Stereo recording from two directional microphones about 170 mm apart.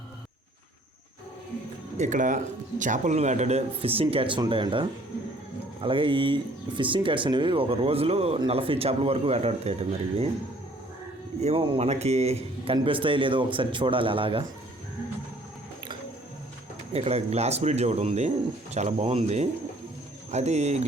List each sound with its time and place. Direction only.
2.0 s speech: 50° right (ahead or behind)
11.3 s speech: 35° right (ahead or behind)
16.9 s speech: 35° right (ahead or behind)